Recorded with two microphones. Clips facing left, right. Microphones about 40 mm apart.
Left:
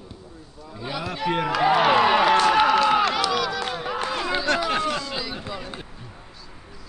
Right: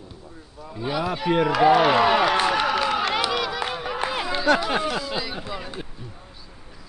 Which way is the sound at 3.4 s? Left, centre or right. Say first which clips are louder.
Even; centre.